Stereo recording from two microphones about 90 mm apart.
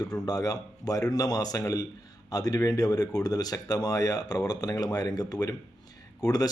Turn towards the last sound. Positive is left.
turn(degrees=45)  # may be behind; listen again after turning